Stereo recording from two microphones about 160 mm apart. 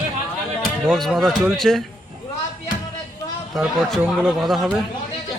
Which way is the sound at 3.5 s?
Centre (ahead or behind).